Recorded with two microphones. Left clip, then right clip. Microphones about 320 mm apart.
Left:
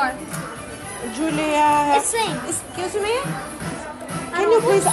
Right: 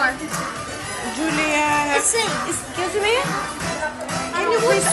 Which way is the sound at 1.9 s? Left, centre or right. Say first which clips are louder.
Left 1 dB; left.